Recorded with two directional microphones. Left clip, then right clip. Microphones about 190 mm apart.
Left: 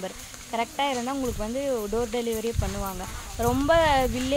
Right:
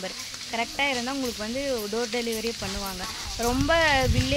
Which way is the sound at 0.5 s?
15° left (ahead or behind).